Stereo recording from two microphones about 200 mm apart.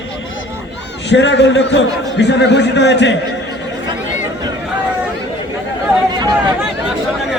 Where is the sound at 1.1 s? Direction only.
65° left (ahead or behind).